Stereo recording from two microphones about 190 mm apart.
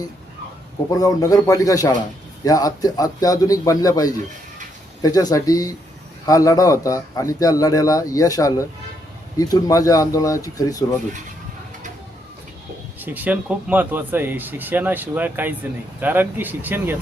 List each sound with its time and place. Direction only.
0.9 s a man's voice: 20° left (ahead or behind)
13.0 s speech: 10° right (ahead or behind)